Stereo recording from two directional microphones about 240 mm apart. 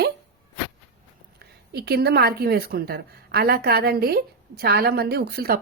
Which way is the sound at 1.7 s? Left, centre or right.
Right.